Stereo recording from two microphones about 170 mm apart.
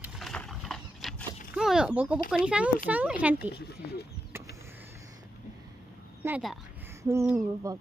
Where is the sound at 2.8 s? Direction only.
10° right (ahead or behind).